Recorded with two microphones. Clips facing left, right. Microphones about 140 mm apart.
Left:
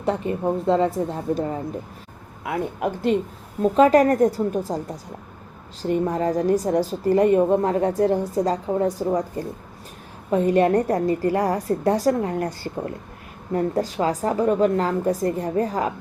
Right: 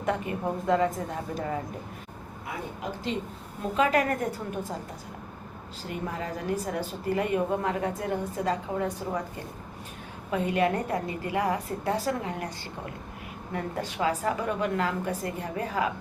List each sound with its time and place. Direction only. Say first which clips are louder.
0.0 s a woman's voice: left 6 dB; 30° left (ahead or behind)
2.4 s speech: left 11 dB; 65° left (ahead or behind)
3.6 s a woman's voice: left 10 dB; 40° left (ahead or behind)
5.8 s a woman's voice: left 12 dB; 40° left (ahead or behind)
10.3 s a woman's voice: left 8 dB; 40° left (ahead or behind)